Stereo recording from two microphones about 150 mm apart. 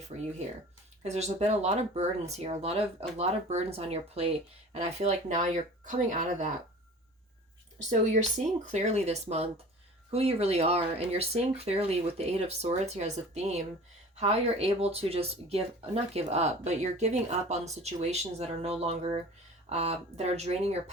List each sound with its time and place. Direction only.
0.1 s speech: 40° right (ahead or behind)
7.9 s speech: 50° right (ahead or behind)